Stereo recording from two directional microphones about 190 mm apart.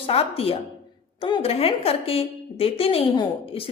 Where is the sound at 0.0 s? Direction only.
30° left (ahead or behind).